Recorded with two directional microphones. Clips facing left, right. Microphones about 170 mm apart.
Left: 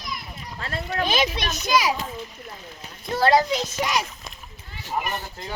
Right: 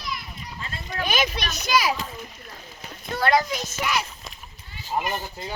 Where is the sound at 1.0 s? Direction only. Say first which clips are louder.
Left 1 dB; 25° left (ahead or behind).